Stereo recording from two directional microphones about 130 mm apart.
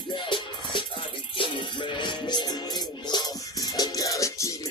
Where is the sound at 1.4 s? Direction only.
35° left (ahead or behind).